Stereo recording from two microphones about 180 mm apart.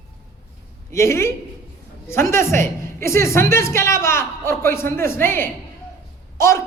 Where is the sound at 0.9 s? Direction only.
15° left (ahead or behind).